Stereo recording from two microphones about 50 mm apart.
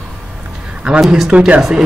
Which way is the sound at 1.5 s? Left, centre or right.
Centre.